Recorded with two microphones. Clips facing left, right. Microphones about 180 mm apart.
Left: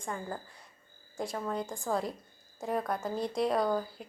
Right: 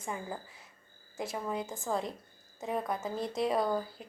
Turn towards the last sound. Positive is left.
turn(degrees=0)  # may be behind; listen again after turning